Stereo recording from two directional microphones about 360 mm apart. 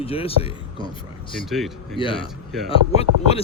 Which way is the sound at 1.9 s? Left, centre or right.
Centre.